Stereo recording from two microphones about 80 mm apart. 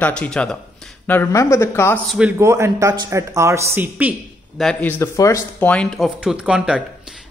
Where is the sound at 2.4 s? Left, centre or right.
Right.